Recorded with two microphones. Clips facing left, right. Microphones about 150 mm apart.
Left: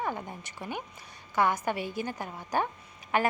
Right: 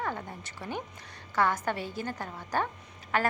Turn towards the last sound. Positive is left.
turn(degrees=15)  # may be behind; listen again after turning